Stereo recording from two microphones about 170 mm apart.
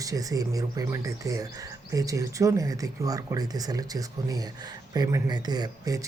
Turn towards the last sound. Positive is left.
turn(degrees=-20)  # may be behind; listen again after turning